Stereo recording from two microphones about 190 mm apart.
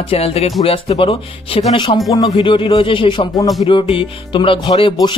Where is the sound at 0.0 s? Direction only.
30° left (ahead or behind).